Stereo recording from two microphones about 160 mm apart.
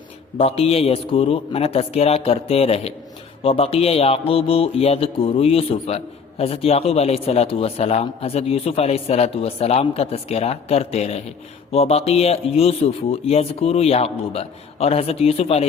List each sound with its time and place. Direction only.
0.3 s a man's voice: 40° left (ahead or behind)